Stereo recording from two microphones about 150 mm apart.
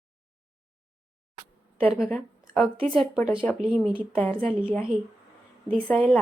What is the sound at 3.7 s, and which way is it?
Speech, 5° right (ahead or behind).